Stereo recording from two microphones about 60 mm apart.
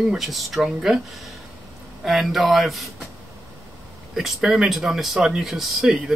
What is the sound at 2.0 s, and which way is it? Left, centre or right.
Speech, centre.